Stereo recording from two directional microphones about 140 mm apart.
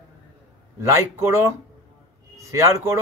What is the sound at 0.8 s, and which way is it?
A man's voice, 20° right (ahead or behind).